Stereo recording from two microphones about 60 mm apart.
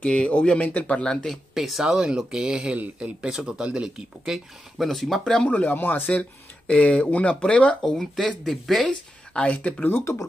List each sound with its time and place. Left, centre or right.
0.0 s speech: centre
1.3 s speech: centre
4.2 s speech: centre
5.5 s speech: left; by 8.9 s centre
9.3 s speech: centre